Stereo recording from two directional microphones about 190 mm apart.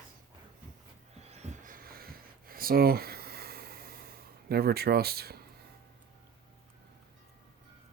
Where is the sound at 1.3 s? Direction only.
40° right (ahead or behind).